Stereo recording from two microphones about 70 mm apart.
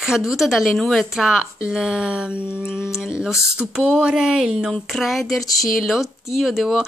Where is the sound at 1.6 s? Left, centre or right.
Centre.